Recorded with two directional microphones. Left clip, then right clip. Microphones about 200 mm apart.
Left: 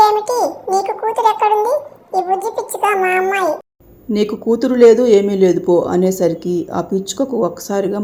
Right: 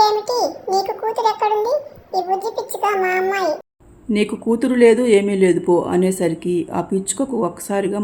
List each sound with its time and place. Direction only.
0.0 s a sound: centre (ahead or behind)
0.3 s babbling: centre (ahead or behind)
2.1 s a child's voice: centre (ahead or behind)